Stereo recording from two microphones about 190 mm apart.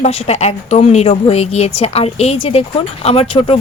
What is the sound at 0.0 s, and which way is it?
A woman's voice, 35° left (ahead or behind).